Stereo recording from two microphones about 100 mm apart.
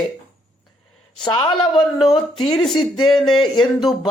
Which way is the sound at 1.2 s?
50° left (ahead or behind).